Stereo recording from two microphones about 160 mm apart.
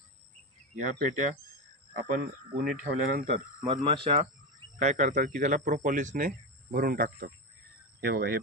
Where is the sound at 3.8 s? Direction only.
35° right (ahead or behind).